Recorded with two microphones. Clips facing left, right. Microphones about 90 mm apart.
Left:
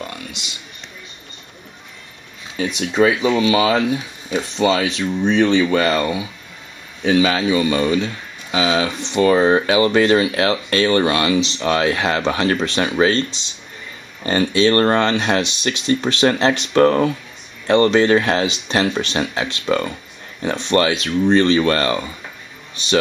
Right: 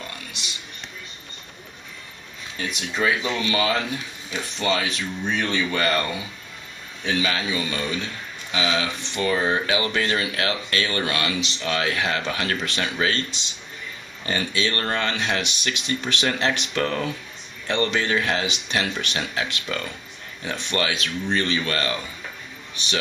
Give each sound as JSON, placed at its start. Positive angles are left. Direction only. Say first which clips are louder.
{"t": 2.5, "sound": "speech", "louder": "left 9 dB", "side_deg": 15}